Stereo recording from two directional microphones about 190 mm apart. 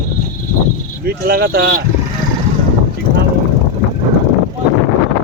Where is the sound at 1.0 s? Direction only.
55° right (ahead or behind).